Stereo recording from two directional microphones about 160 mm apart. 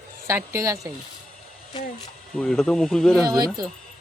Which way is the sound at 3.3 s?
25° right (ahead or behind).